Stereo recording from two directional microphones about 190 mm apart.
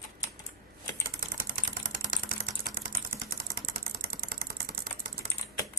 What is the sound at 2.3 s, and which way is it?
Engine, 45° right (ahead or behind).